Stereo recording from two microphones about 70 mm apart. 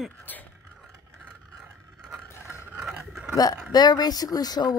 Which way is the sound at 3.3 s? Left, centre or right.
Left.